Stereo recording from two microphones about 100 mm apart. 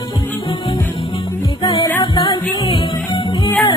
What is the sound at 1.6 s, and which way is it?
Music, 40° left (ahead or behind).